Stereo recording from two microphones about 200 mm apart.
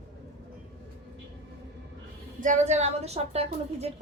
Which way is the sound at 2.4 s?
35° right (ahead or behind).